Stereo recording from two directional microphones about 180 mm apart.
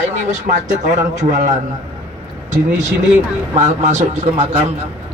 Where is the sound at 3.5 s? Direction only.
40° right (ahead or behind).